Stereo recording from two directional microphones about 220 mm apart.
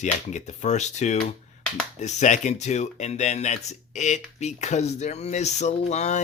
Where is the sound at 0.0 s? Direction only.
30° left (ahead or behind).